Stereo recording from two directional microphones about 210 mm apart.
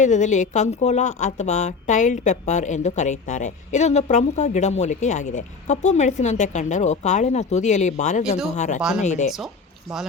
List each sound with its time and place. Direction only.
0.0 s a woman's voice: 35° left (ahead or behind)